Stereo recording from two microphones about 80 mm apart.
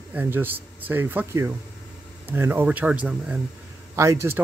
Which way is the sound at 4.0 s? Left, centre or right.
Right.